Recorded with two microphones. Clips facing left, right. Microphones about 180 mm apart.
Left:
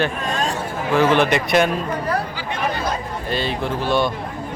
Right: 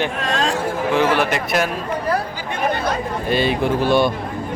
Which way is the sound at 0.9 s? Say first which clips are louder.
Left 3 dB; 10° right (ahead or behind).